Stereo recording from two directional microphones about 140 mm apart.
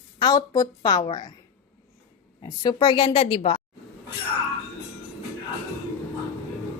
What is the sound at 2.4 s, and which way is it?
A woman's voice, 25° left (ahead or behind).